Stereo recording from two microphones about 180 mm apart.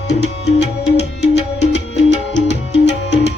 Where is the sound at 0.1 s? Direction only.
70° left (ahead or behind).